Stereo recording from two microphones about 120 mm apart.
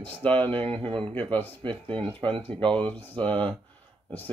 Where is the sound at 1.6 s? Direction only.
45° right (ahead or behind).